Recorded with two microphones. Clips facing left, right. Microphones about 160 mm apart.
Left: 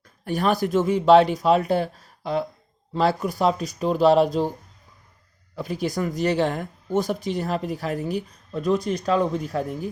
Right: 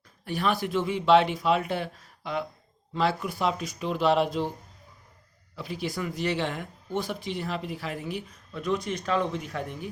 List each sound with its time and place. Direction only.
0.3 s speech: 45° left (ahead or behind)
5.5 s speech: 45° left (ahead or behind)